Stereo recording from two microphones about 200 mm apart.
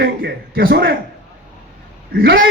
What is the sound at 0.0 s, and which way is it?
Speech, 50° right (ahead or behind).